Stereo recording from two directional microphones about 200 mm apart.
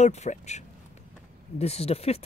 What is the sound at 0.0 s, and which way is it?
Speech, 35° left (ahead or behind).